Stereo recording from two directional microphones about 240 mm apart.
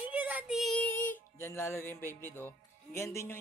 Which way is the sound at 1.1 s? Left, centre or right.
Centre.